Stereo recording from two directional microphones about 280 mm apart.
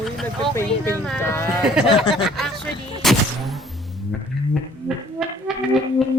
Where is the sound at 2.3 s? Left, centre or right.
Centre.